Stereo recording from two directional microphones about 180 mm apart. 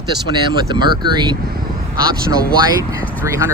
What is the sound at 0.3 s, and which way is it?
Speech, 25° right (ahead or behind).